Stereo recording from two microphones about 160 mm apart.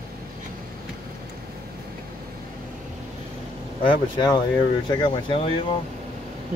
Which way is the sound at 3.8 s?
30° left (ahead or behind).